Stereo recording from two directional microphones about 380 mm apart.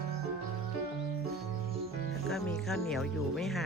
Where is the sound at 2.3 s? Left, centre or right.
Centre.